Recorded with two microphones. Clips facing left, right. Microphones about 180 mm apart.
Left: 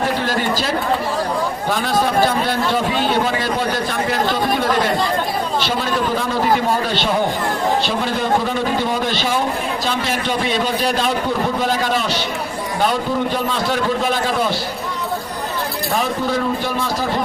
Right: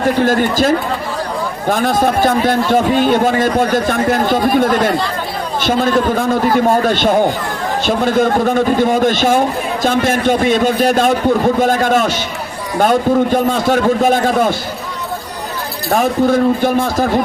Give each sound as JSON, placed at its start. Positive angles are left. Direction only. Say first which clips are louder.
{"t": 0.2, "sound": "a man's voice", "louder": "right 7 dB", "side_deg": -50}
{"t": 1.7, "sound": "a man's voice", "louder": "right 5 dB", "side_deg": -50}
{"t": 5.6, "sound": "a man's voice", "louder": "right 6 dB", "side_deg": -50}
{"t": 15.9, "sound": "a man's voice", "louder": "right 8 dB", "side_deg": -50}